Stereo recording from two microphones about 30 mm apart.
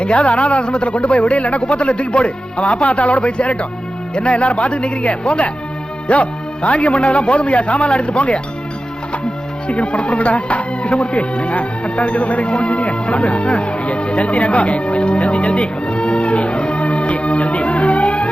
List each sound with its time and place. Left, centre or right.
0.0 s a man's voice: left
7.9 s speech: left
9.6 s a man's voice: left